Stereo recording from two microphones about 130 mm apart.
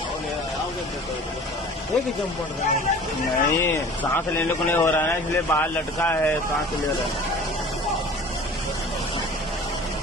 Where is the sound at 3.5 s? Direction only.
20° left (ahead or behind).